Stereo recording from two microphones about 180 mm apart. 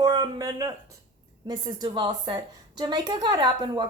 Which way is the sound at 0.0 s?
20° right (ahead or behind).